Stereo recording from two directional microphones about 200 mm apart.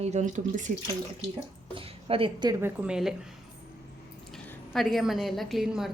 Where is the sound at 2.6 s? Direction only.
5° right (ahead or behind).